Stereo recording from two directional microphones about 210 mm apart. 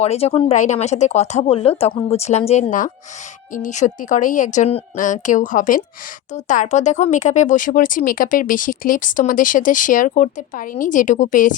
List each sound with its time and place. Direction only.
0.0 s speech: 30° left (ahead or behind)